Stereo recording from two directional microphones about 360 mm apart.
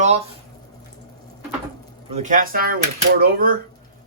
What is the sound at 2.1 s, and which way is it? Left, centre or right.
Speech, centre.